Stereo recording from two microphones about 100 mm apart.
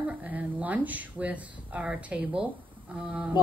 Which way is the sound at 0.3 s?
15° right (ahead or behind).